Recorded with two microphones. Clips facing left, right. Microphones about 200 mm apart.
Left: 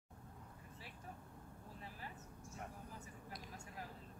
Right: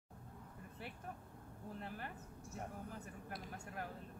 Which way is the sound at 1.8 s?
65° right (ahead or behind).